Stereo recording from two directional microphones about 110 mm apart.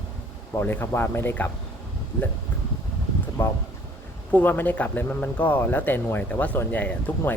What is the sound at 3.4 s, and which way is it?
Speech, 20° left (ahead or behind).